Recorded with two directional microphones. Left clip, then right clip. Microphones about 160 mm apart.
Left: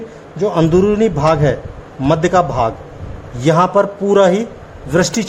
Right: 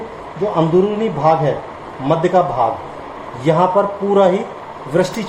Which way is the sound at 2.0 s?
80° left.